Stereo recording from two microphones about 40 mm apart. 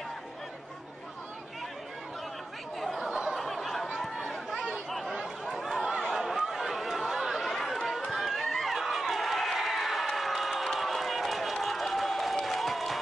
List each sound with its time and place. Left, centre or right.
2.8 s chatter: centre
3.1 s a sound: centre
3.3 s a sound: centre
4.0 s chatter: centre
4.8 s a sound: centre
6.1 s chatter: centre
7.5 s chatter: centre
8.1 s run: centre
11.6 s applause: centre